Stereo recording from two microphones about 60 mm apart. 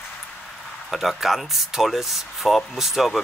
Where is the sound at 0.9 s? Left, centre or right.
Centre.